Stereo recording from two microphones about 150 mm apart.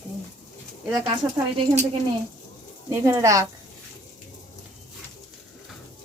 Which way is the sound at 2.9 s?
20° right (ahead or behind).